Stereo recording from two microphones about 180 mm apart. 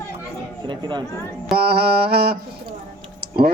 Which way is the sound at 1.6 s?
60° right (ahead or behind).